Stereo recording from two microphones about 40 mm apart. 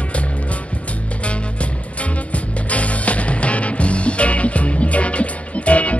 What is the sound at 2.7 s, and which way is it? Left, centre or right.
Music, left.